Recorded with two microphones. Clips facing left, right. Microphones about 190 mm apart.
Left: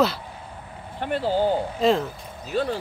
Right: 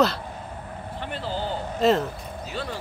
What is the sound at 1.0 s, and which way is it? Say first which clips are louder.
Speech: left 9 dB; 50° left (ahead or behind).